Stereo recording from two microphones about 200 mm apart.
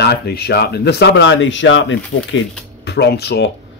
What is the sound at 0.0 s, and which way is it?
Speech, 55° left (ahead or behind).